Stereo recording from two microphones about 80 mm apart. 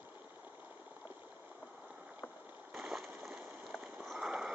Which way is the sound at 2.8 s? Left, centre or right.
Centre.